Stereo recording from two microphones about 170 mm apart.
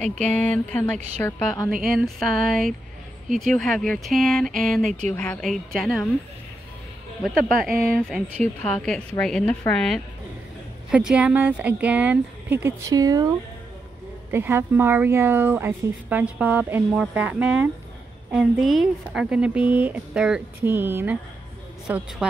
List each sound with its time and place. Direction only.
0.0 s speech: 5° left (ahead or behind)
7.2 s speech: centre (ahead or behind); by 13.3 s 20° right (ahead or behind)
14.3 s speech: 15° right (ahead or behind)